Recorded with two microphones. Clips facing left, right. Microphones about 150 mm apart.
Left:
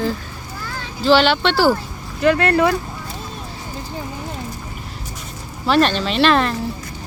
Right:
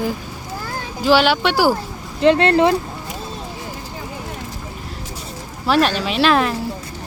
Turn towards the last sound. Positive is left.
turn(degrees=-5)  # may be behind; listen again after turning